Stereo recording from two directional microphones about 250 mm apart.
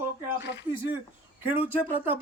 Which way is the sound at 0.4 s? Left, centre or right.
Left.